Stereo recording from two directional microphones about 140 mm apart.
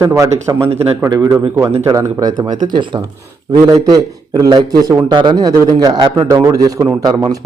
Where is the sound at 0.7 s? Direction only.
45° right (ahead or behind).